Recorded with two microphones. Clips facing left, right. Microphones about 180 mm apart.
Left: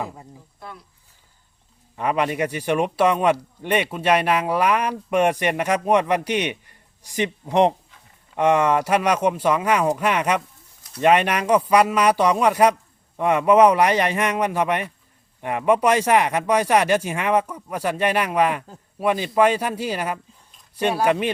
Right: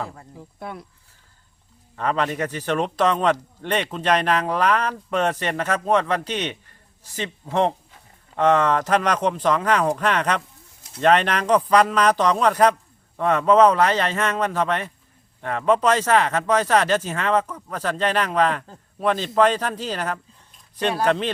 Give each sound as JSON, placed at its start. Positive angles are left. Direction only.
{"t": 0.0, "sound": "speech", "side_deg": 15}
{"t": 0.6, "sound": "speech", "side_deg": -60}
{"t": 2.0, "sound": "speech", "side_deg": 10}